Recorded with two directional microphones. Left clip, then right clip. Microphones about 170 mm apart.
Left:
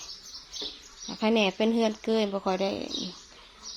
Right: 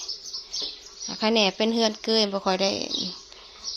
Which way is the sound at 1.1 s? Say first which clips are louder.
Right 3 dB; 5° left (ahead or behind).